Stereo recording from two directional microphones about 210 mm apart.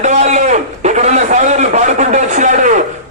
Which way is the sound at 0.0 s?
35° right (ahead or behind).